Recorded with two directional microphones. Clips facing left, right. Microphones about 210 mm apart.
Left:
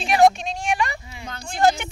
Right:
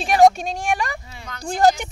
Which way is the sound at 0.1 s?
45° right (ahead or behind).